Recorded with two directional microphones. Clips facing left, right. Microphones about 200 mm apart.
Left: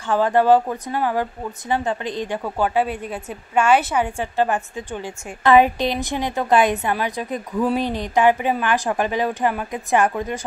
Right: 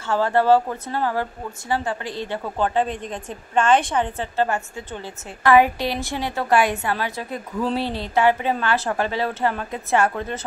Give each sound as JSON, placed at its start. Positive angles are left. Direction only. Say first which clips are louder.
{"t": 0.1, "sound": "a woman's voice", "louder": "left 2 dB", "side_deg": 15}